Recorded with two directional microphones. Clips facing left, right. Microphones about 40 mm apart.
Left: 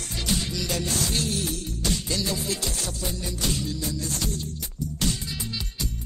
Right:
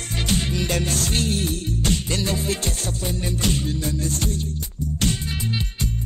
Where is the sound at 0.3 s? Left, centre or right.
Right.